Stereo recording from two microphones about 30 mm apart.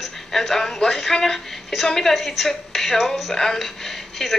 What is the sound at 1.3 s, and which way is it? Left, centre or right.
Speech, centre.